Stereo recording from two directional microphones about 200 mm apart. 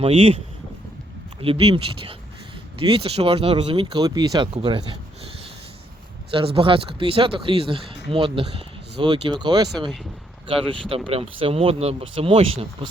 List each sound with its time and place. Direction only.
0.0 s speech: 30° right (ahead or behind)
1.4 s speech: 30° right (ahead or behind)
6.3 s speech: 25° right (ahead or behind)
10.8 s speech: 30° right (ahead or behind)